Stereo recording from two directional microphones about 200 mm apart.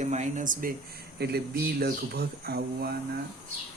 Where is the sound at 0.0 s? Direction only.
35° right (ahead or behind).